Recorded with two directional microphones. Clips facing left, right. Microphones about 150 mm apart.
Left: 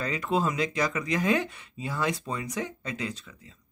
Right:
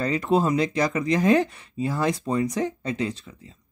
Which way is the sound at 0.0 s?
35° right (ahead or behind).